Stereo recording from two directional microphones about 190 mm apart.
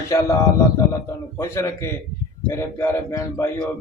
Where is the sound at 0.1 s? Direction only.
15° left (ahead or behind).